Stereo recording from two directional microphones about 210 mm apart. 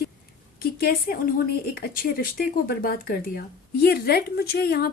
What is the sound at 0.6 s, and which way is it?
Speech, 45° left (ahead or behind).